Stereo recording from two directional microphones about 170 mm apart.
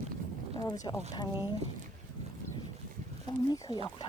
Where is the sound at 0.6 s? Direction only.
20° left (ahead or behind).